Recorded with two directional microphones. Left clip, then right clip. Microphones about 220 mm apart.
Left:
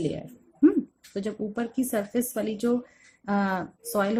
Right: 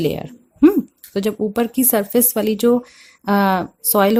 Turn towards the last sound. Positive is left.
turn(degrees=-45)  # may be behind; listen again after turning